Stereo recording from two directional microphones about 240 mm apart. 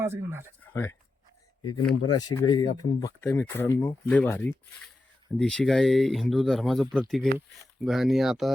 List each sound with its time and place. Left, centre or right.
0.0 s speech: centre
0.6 s speech: centre
2.1 s speech: centre